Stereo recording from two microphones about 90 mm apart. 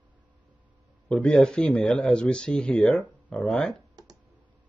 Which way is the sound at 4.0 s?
45° right (ahead or behind).